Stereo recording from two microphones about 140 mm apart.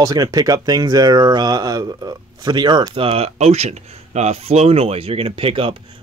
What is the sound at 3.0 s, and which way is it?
Speech, 45° right (ahead or behind).